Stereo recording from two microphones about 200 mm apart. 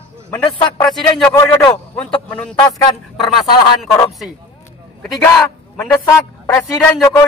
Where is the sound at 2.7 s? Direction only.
20° left (ahead or behind).